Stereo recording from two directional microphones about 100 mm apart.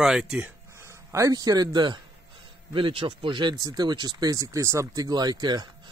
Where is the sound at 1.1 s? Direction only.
35° right (ahead or behind).